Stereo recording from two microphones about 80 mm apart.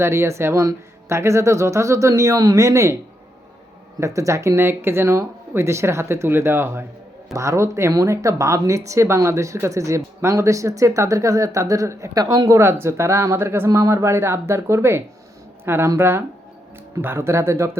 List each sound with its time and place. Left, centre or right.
0.0 s speech: right
4.0 s speech: right
7.3 s speech: right
12.5 s speech: right